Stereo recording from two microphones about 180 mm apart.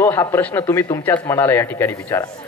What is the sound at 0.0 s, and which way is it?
A man's voice, 15° left (ahead or behind).